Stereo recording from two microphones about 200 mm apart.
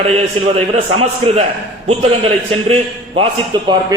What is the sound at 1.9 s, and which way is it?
A man's voice, 30° right (ahead or behind).